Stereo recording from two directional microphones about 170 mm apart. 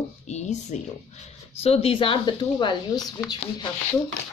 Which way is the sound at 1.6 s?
35° left (ahead or behind).